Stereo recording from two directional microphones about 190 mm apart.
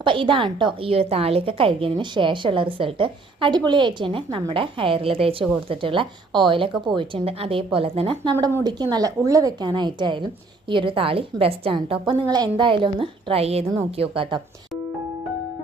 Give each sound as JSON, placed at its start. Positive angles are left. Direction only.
{"t": 0.0, "sound": "a woman's voice", "side_deg": -25}